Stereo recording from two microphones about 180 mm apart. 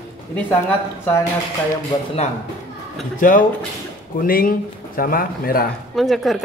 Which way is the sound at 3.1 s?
45° left (ahead or behind).